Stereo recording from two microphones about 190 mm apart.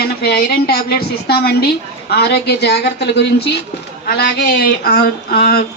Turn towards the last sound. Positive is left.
turn(degrees=55)  # may be behind; listen again after turning